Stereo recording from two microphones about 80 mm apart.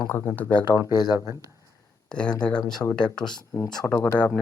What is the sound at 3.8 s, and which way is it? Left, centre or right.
Speech, left.